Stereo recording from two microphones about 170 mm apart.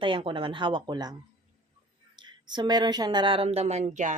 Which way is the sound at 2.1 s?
25° right (ahead or behind).